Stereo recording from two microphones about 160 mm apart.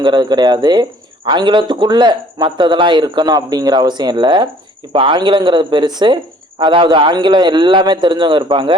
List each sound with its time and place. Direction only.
0.0 s speech: 30° right (ahead or behind)